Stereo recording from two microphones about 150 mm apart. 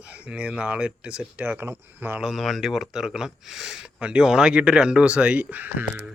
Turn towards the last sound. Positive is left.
turn(degrees=-10)  # may be behind; listen again after turning